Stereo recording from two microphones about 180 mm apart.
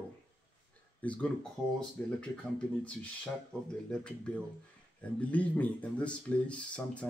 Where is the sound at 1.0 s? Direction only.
5° left (ahead or behind).